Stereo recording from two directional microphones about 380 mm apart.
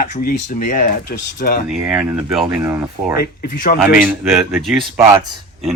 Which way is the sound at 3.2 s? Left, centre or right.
Left.